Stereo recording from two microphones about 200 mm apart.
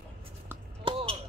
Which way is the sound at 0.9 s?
25° right (ahead or behind).